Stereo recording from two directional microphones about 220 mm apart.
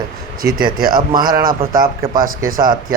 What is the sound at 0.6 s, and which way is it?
Speech, 40° right (ahead or behind).